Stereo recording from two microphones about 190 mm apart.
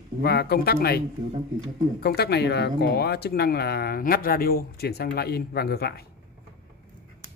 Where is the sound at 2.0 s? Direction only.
55° left (ahead or behind).